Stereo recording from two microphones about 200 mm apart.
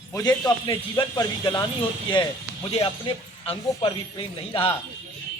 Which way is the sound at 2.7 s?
30° left (ahead or behind).